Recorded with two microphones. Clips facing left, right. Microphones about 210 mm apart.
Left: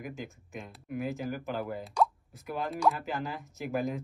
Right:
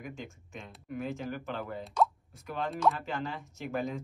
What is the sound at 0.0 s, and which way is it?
Speech, 5° left (ahead or behind).